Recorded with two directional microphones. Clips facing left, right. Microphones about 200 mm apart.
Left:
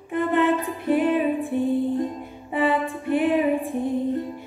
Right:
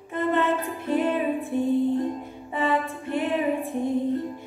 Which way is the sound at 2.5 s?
15° left (ahead or behind).